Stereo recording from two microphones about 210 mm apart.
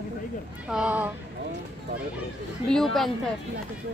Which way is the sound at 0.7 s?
5° right (ahead or behind).